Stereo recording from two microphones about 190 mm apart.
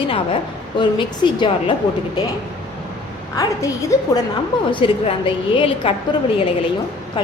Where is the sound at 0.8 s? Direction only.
25° left (ahead or behind).